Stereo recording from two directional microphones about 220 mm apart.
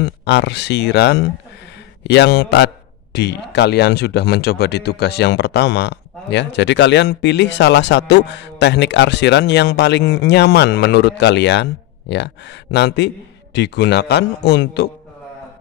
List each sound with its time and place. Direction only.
0.0 s a man's voice: 50° left (ahead or behind)